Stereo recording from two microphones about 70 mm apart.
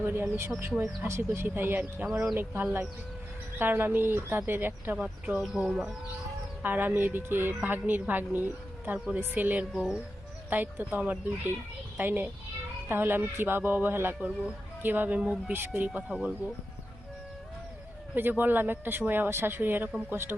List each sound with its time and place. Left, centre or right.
0.0 s speech: right
1.5 s a woman's voice: right
5.6 s speech: centre
6.6 s a woman's voice: right
9.7 s speech: centre
10.5 s a woman's voice: right
14.2 s speech: centre
14.8 s a woman's voice: right
18.1 s a woman's voice: right